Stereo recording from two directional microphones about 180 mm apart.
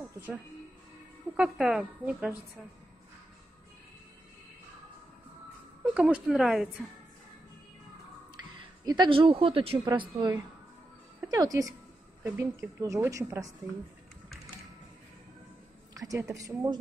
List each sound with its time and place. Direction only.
1.3 s a woman's voice: 5° right (ahead or behind)
5.9 s a woman's voice: 5° right (ahead or behind)
8.8 s a woman's voice: 25° right (ahead or behind)
15.9 s a woman's voice: 20° right (ahead or behind)